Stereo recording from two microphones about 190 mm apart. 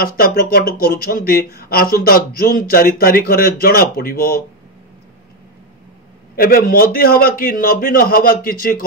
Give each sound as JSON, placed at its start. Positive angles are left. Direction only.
{"t": 0.0, "sound": "speech", "side_deg": 50}
{"t": 6.3, "sound": "speech", "side_deg": 50}